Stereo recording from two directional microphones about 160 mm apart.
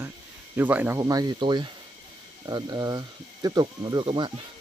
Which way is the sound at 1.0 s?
25° right (ahead or behind).